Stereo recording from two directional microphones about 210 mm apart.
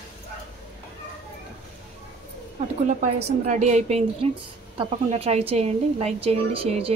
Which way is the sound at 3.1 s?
35° right (ahead or behind).